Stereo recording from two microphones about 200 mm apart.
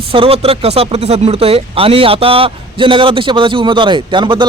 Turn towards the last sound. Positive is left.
turn(degrees=-25)  # may be behind; listen again after turning